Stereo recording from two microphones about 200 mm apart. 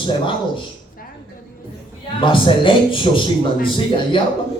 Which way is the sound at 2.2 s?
25° left (ahead or behind).